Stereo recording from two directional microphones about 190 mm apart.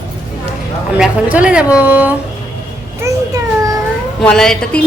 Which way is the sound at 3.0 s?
15° right (ahead or behind).